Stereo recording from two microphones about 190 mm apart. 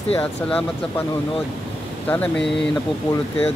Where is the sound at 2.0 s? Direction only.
5° left (ahead or behind).